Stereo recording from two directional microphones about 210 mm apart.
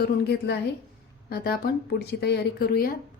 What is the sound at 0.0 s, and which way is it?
A woman's voice, 50° left (ahead or behind).